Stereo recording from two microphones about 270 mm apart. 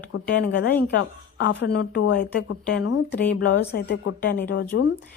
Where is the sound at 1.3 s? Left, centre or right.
Left.